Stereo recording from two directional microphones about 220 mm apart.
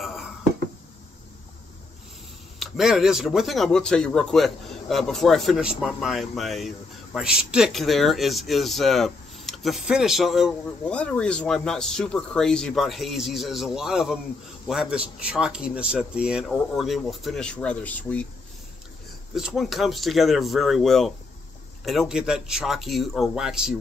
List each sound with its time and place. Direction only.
0.0 s a sound: centre (ahead or behind)
2.6 s speech: centre (ahead or behind)
19.3 s speech: centre (ahead or behind)